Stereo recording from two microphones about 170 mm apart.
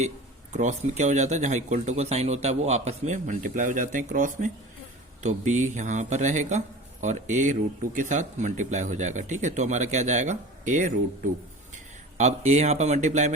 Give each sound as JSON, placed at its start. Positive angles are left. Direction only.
{"t": 0.5, "sound": "speech", "side_deg": -45}
{"t": 12.1, "sound": "speech", "side_deg": -40}